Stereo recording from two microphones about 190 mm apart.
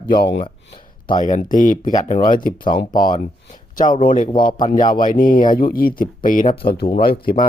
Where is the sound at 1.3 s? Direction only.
40° left (ahead or behind).